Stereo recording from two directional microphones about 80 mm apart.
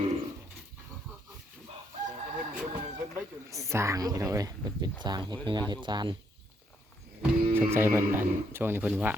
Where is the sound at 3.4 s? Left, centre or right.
Right.